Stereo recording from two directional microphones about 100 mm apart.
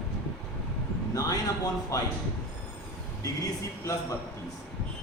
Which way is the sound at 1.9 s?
35° left (ahead or behind).